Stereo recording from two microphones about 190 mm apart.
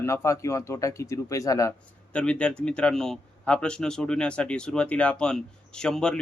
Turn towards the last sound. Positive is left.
turn(degrees=5)  # may be behind; listen again after turning